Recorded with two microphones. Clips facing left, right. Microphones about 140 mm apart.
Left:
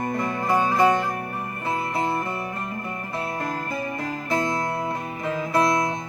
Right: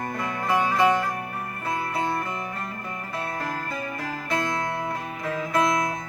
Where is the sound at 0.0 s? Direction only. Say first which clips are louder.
Left 4 dB; 25° left (ahead or behind).